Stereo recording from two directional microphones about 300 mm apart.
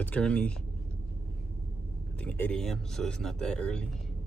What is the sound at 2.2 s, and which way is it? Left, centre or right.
Speech, centre.